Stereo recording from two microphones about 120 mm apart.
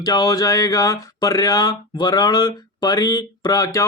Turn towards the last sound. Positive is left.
turn(degrees=30)  # may be behind; listen again after turning